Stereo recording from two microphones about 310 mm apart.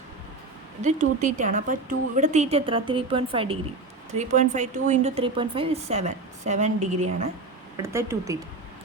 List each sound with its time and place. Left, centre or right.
0.8 s speech: right
7.8 s speech: centre